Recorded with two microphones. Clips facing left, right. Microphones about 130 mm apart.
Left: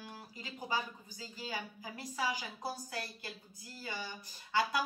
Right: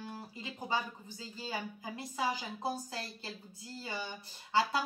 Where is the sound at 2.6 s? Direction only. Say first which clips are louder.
Right 4 dB; 25° right (ahead or behind).